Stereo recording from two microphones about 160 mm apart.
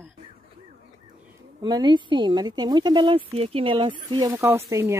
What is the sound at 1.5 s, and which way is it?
Speech, 25° right (ahead or behind).